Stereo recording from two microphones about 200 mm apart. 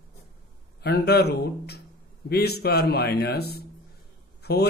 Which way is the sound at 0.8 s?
55° left (ahead or behind).